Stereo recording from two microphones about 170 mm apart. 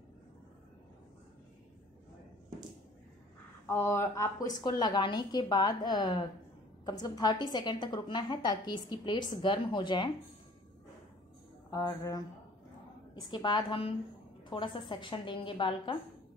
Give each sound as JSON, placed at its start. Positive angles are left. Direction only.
{"t": 3.6, "sound": "a woman's voice", "side_deg": 15}
{"t": 11.7, "sound": "a woman's voice", "side_deg": 20}